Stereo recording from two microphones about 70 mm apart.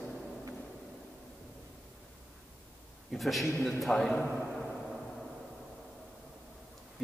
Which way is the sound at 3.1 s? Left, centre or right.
Centre.